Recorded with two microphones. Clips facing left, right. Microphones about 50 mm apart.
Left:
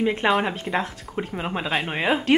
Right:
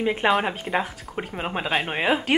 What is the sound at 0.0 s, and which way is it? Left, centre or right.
A woman's voice, centre.